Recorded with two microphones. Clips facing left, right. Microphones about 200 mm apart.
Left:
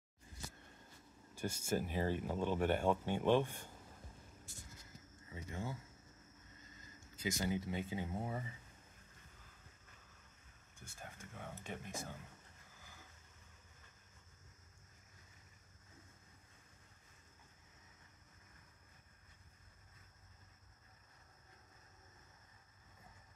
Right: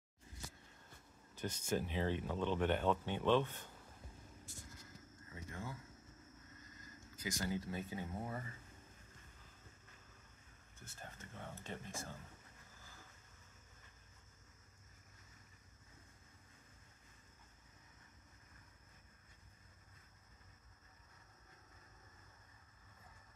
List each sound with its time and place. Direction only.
1.3 s speech: 10° left (ahead or behind)
5.3 s speech: 25° left (ahead or behind)
7.2 s speech: 20° left (ahead or behind)
10.9 s speech: 10° left (ahead or behind)